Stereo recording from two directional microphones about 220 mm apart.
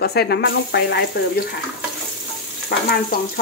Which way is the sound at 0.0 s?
45° left (ahead or behind).